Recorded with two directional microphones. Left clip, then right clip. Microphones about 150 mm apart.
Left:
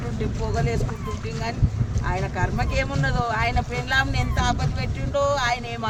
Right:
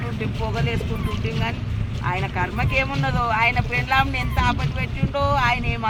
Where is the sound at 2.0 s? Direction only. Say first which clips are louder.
Right 2 dB; 50° right (ahead or behind).